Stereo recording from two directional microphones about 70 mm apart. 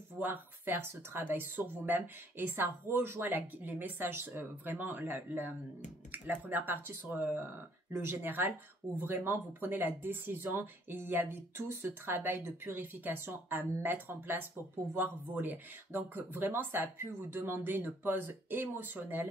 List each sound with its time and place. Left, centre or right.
0.2 s speech: right